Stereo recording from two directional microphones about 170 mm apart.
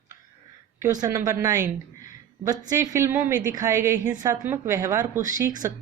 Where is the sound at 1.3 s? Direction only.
20° right (ahead or behind).